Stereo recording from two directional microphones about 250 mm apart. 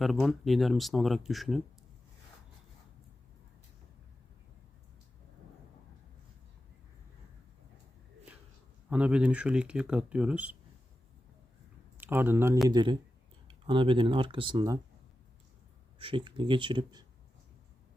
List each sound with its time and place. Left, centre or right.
0.0 s speech: centre
8.9 s speech: centre
11.9 s speech: centre
16.0 s speech: centre